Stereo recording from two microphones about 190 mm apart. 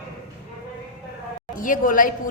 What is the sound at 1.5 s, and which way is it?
Speech, 45° left (ahead or behind).